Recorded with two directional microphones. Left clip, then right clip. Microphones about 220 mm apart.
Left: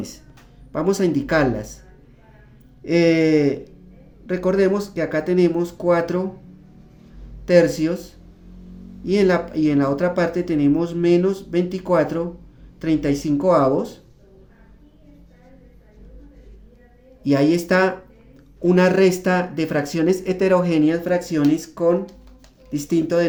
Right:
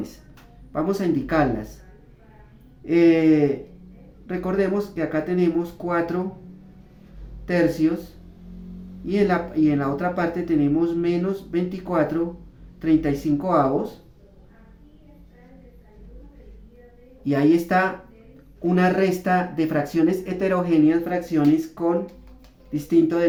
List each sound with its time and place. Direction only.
0.7 s speech: 50° left (ahead or behind)
2.8 s speech: 50° left (ahead or behind)
7.4 s speech: 55° left (ahead or behind)
9.0 s speech: 50° left (ahead or behind)
17.2 s speech: 50° left (ahead or behind)